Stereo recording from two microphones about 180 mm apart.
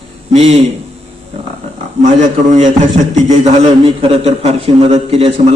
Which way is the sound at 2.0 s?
45° right (ahead or behind).